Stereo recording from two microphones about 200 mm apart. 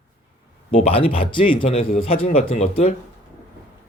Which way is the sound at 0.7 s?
30° left (ahead or behind).